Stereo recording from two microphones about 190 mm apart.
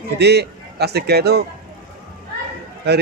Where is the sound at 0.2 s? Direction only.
60° right (ahead or behind).